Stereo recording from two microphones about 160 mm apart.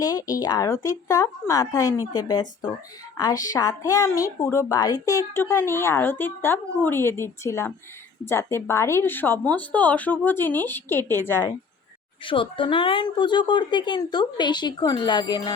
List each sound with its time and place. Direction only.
0.0 s a woman's voice: 20° left (ahead or behind)
12.2 s a woman's voice: 30° left (ahead or behind)